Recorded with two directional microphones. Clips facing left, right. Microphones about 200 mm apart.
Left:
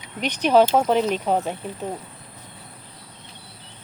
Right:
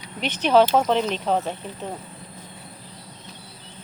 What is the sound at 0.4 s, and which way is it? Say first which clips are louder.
Speech: left 1 dB; 10° left (ahead or behind).